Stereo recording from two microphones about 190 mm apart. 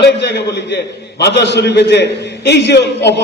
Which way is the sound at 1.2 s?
65° left (ahead or behind).